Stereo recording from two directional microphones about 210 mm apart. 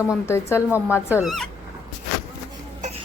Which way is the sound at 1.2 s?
Centre (ahead or behind).